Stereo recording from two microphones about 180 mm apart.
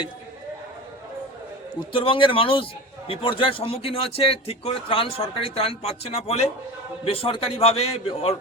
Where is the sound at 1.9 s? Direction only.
30° left (ahead or behind).